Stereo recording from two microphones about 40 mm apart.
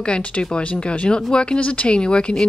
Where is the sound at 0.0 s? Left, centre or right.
Left.